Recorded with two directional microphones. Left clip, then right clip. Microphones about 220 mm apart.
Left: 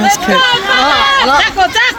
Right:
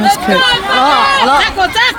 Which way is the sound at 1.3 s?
35° left (ahead or behind).